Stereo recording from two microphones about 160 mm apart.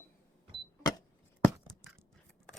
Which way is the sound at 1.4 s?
Centre (ahead or behind).